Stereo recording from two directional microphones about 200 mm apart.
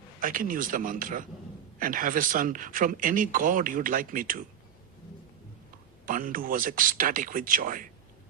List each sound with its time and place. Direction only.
0.2 s speech: 45° right (ahead or behind)
6.1 s speech: 45° right (ahead or behind)